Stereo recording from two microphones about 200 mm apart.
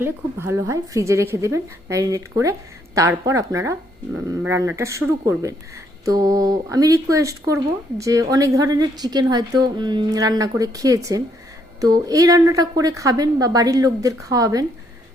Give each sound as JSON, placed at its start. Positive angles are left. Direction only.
{"t": 0.0, "sound": "speech", "side_deg": -10}